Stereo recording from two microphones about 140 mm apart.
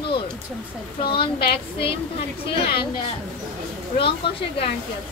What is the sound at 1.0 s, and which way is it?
Speech, 35° left (ahead or behind).